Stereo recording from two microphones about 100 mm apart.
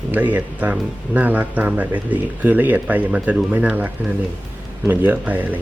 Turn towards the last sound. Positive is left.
turn(degrees=-15)  # may be behind; listen again after turning